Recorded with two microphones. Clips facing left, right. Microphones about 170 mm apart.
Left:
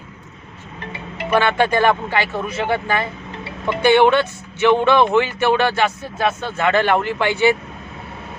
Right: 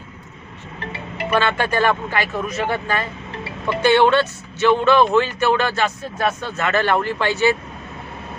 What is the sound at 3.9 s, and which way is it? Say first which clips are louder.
Speech: left 1 dB; 15° left (ahead or behind).